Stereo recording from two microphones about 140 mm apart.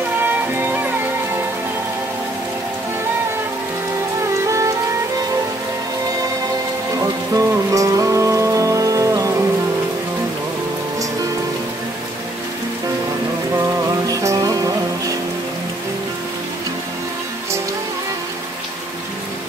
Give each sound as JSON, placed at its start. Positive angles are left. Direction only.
{"t": 0.2, "sound": "music", "side_deg": -15}
{"t": 4.2, "sound": "music", "side_deg": -20}
{"t": 7.0, "sound": "music", "side_deg": -25}
{"t": 13.6, "sound": "music", "side_deg": -25}